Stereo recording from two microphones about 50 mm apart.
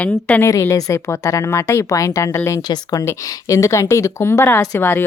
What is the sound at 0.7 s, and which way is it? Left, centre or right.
A woman's voice, left.